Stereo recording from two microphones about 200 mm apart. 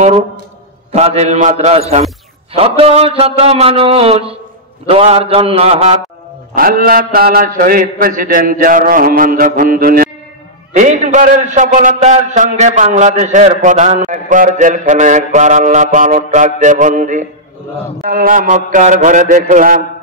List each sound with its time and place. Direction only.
0.9 s a man's voice: 30° right (ahead or behind)
6.5 s a man's voice: 45° right (ahead or behind)
10.8 s a man's voice: 35° right (ahead or behind)